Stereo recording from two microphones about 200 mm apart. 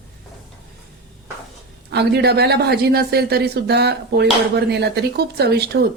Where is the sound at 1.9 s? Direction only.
55° right (ahead or behind).